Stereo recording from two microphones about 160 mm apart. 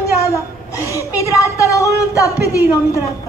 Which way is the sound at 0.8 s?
20° left (ahead or behind).